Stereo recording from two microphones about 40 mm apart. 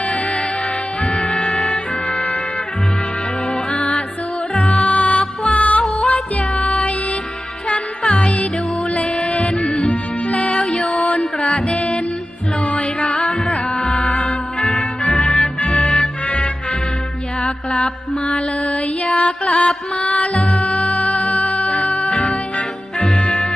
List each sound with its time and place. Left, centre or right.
0.1 s music: left
1.0 s music: centre
2.0 s music: left
3.5 s music: centre
10.8 s music: left
14.7 s music: centre
17.4 s mantra: left
18.6 s music: left
22.1 s music: centre